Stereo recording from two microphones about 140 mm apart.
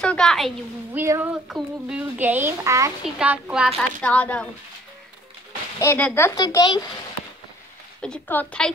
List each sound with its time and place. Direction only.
0.0 s a child's voice: 5° left (ahead or behind)
0.9 s speech: 20° right (ahead or behind)
1.3 s speech: 5° right (ahead or behind)
3.2 s speech: 10° right (ahead or behind)
3.7 s speech: 10° left (ahead or behind)
5.8 s a child's voice: 20° left (ahead or behind)
6.4 s a child's voice: 30° left (ahead or behind)
8.0 s speech: 10° left (ahead or behind)